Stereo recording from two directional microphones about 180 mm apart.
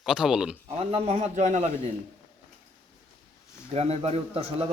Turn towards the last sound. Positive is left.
turn(degrees=-35)  # may be behind; listen again after turning